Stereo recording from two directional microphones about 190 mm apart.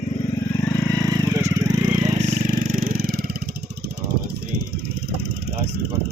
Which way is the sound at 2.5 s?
50° right (ahead or behind).